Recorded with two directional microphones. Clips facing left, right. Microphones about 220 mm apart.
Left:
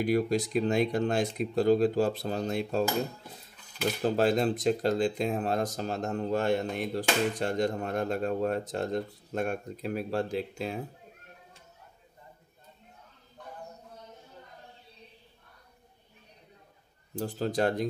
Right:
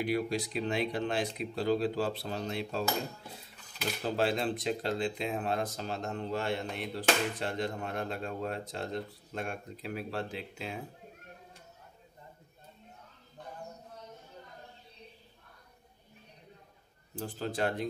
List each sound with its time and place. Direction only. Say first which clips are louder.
0.0 s speech: left 5 dB; 45° left (ahead or behind)
4.0 s speech: left 5 dB; 45° left (ahead or behind)
17.1 s a man's voice: left 6 dB; 40° left (ahead or behind)